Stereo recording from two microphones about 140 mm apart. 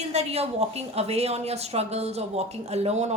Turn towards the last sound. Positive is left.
turn(degrees=-50)  # may be behind; listen again after turning